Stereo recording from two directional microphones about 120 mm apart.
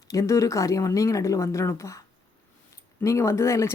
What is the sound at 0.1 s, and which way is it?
A woman's voice, 25° left (ahead or behind).